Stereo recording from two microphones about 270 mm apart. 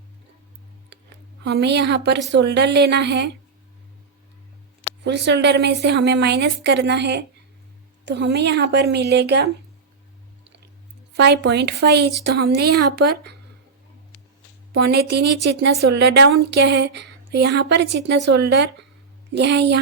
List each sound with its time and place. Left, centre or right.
1.5 s speech: right
5.0 s speech: right
11.2 s speech: right
14.7 s speech: right